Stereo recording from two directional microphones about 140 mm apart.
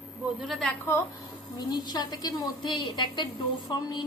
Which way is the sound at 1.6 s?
30° left (ahead or behind).